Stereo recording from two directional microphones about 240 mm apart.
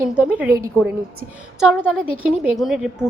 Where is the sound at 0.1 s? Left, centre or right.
Centre.